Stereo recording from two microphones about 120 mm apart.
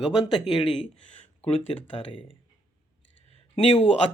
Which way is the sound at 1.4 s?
60° left (ahead or behind).